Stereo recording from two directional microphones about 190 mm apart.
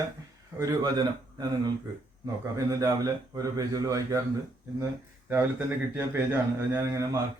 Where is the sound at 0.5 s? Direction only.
20° right (ahead or behind).